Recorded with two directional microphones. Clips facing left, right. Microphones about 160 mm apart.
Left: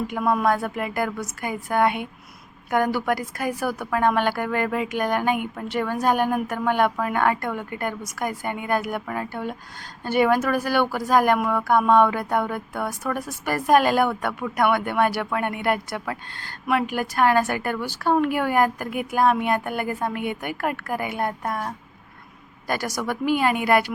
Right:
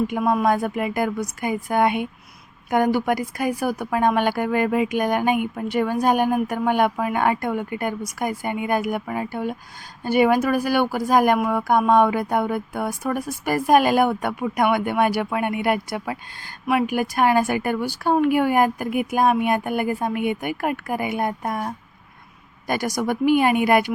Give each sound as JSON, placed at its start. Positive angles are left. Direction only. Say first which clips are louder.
{"t": 0.1, "sound": "a woman's voice", "louder": "right 2 dB", "side_deg": -15}